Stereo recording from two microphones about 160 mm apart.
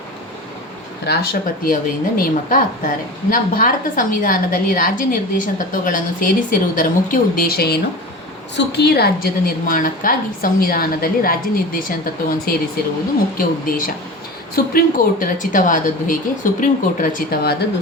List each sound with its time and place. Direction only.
1.0 s a woman's voice: 85° left
8.5 s a woman's voice: 90° left; by 17.5 s 65° left (ahead or behind)